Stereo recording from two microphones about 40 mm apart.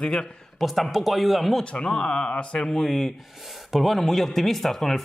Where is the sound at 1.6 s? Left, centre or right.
Left.